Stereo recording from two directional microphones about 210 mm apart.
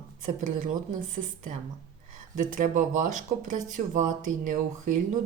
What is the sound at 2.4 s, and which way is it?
Speech, 40° right (ahead or behind).